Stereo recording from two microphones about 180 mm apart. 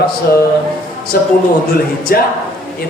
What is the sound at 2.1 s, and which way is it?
Speech, 55° left (ahead or behind).